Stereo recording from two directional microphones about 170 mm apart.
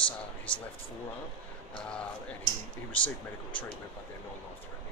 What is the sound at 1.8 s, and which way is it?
Speech, 5° left (ahead or behind).